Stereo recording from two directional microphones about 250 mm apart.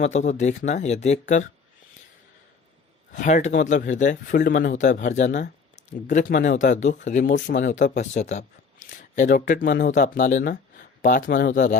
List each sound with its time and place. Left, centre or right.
0.0 s speech: left
3.1 s speech: left